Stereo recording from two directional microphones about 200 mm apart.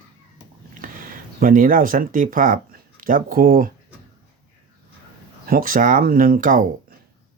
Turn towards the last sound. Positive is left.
turn(degrees=-40)  # may be behind; listen again after turning